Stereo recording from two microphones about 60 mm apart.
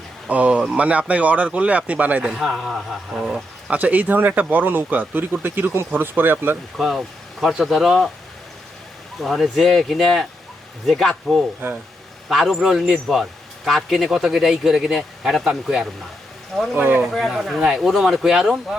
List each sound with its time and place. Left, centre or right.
0.3 s speech: right
2.2 s a man's voice: centre
3.7 s speech: right
6.7 s a man's voice: centre
9.2 s a man's voice: centre
12.3 s a man's voice: centre
16.7 s speech: right
17.1 s a man's voice: centre